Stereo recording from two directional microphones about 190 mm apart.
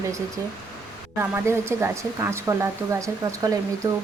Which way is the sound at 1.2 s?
15° right (ahead or behind).